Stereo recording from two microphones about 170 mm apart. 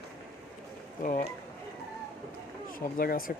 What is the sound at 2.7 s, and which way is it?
Speech, 55° left (ahead or behind).